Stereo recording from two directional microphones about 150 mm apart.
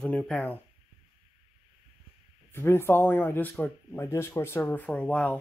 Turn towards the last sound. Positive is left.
turn(degrees=10)  # may be behind; listen again after turning